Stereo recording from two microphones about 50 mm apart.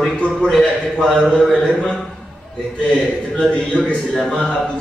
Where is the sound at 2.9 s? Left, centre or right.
Left.